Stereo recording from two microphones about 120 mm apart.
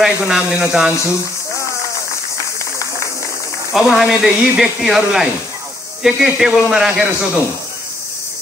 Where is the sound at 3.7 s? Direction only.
5° right (ahead or behind).